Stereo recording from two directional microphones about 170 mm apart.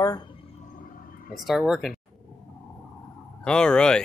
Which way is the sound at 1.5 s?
Centre (ahead or behind).